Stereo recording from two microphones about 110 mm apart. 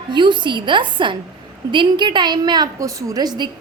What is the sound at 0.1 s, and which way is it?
A woman's voice, 45° right (ahead or behind).